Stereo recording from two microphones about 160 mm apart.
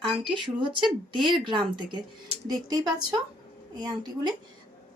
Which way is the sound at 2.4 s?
25° right (ahead or behind).